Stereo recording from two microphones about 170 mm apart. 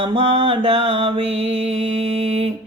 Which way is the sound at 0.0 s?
30° right (ahead or behind).